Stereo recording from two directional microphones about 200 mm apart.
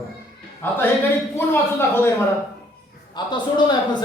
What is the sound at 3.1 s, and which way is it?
Speech, 20° left (ahead or behind).